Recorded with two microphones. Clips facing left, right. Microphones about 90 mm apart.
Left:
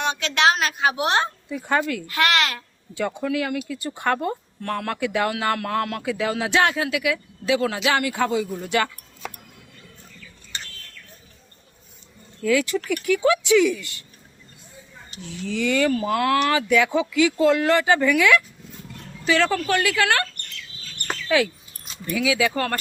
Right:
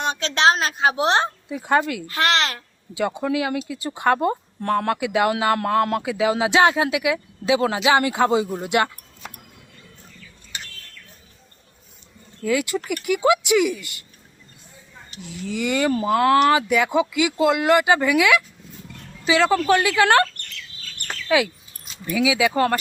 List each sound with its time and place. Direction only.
0.0 s a woman's voice: 35° right (ahead or behind)
1.5 s speech: 15° right (ahead or behind)
2.0 s a woman's voice: 30° right (ahead or behind)
3.3 s speech: 20° right (ahead or behind)
5.8 s speech: 30° right (ahead or behind)
6.1 s speech: 15° right (ahead or behind)
12.4 s speech: 10° right (ahead or behind)
15.2 s speech: 5° right (ahead or behind)
15.9 s speech: 25° right (ahead or behind)
16.5 s speech: 5° right (ahead or behind); by 20.1 s 20° right (ahead or behind)
21.2 s speech: 10° right (ahead or behind)